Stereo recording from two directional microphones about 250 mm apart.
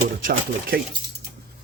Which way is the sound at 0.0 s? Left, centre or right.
Right.